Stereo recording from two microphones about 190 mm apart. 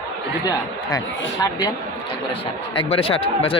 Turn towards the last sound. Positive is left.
turn(degrees=30)  # may be behind; listen again after turning